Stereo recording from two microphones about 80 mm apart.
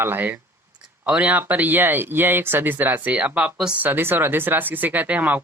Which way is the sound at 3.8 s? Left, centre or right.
Right.